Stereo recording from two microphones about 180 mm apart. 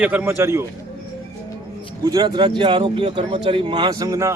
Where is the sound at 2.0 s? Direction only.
20° right (ahead or behind).